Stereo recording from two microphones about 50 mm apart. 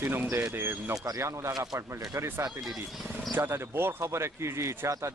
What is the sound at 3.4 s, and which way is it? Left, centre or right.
Speech, right.